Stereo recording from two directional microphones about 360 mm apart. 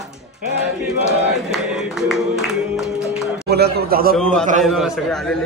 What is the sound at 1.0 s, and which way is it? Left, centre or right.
Battle cry, right.